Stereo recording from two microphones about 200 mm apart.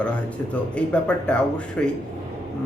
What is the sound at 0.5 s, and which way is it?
Speech, 5° left (ahead or behind).